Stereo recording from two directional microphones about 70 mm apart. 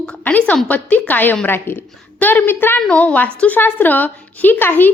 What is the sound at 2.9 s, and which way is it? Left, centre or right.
A woman's voice, left.